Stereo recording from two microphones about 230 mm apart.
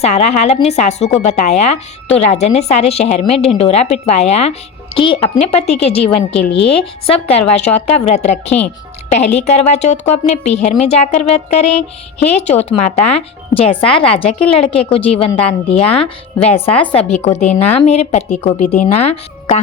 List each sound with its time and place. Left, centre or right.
0.0 s a woman's voice: left
6.4 s a woman's voice: left
7.1 s a woman's voice: left
16.5 s a woman's voice: centre
16.8 s a woman's voice: left